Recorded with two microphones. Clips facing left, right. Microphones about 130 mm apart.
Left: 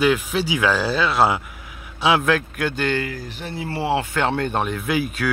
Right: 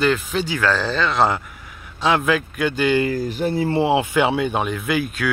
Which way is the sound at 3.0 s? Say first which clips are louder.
Right 10 dB; 40° right (ahead or behind).